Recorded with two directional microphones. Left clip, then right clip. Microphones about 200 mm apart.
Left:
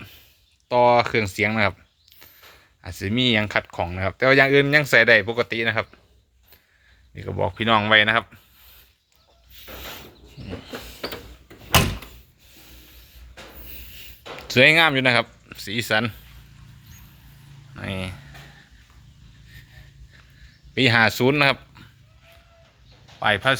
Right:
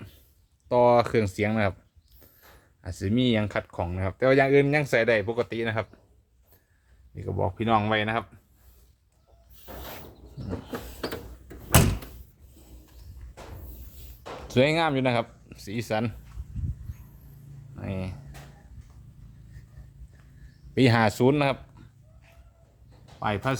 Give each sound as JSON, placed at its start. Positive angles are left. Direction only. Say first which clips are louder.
{"t": 0.7, "sound": "speech", "louder": "left 3 dB", "side_deg": -15}
{"t": 2.8, "sound": "speech", "louder": "left 5 dB", "side_deg": -10}
{"t": 7.2, "sound": "speech", "louder": "left 4 dB", "side_deg": 0}
{"t": 10.7, "sound": "a sound", "louder": "left 3 dB", "side_deg": -25}
{"t": 14.4, "sound": "speech", "louder": "left 8 dB", "side_deg": -5}
{"t": 17.7, "sound": "a sound", "louder": "left 6 dB", "side_deg": 0}
{"t": 20.7, "sound": "speech", "louder": "left 5 dB", "side_deg": -20}
{"t": 23.2, "sound": "speech", "louder": "left 8 dB", "side_deg": 5}